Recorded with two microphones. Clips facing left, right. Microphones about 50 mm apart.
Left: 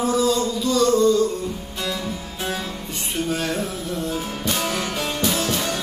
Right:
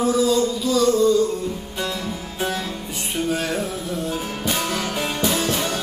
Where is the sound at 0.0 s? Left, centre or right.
Centre.